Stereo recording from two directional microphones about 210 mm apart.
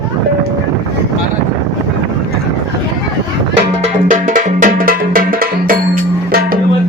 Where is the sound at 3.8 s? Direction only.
40° right (ahead or behind).